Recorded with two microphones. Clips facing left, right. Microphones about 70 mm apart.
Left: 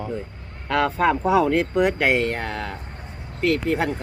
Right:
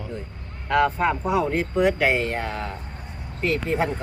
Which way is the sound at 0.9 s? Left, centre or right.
Left.